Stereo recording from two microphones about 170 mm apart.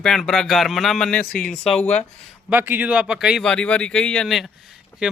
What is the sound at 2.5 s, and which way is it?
Speech, 10° right (ahead or behind).